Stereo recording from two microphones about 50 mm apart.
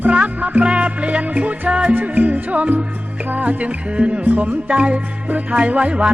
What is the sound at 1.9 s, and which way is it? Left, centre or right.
Music, right.